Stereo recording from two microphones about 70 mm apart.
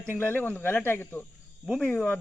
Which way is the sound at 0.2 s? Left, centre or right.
Left.